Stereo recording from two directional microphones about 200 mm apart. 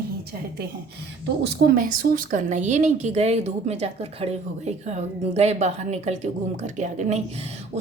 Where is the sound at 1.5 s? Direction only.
50° right (ahead or behind).